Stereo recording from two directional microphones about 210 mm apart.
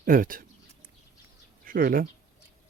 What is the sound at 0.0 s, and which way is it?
Speech, 40° right (ahead or behind).